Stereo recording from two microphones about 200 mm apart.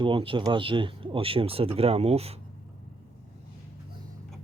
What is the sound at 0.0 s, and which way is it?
Speech, 25° right (ahead or behind).